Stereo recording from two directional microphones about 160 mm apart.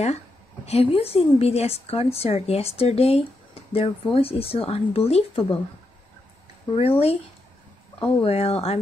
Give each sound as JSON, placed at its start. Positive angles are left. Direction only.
{"t": 0.7, "sound": "a woman's voice", "side_deg": 40}
{"t": 6.7, "sound": "a woman's voice", "side_deg": 35}